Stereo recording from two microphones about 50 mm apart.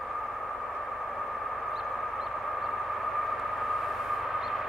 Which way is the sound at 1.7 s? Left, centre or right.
Centre.